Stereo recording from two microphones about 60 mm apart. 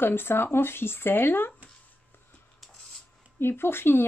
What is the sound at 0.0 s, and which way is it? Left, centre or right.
Speech, left.